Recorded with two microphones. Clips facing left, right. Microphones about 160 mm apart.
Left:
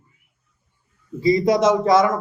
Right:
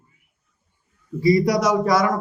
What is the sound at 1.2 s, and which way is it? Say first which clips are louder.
Speech: left 1 dB; 25° left (ahead or behind).